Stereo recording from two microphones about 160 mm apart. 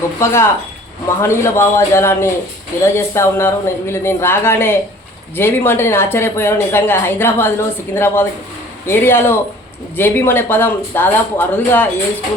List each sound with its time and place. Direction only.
0.2 s a woman's voice: 15° left (ahead or behind)